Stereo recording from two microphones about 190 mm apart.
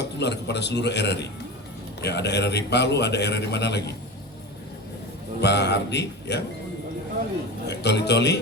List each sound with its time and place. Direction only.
0.0 s a man's voice: 65° left (ahead or behind)
5.4 s a man's voice: 60° left (ahead or behind)
7.7 s a man's voice: 60° left (ahead or behind)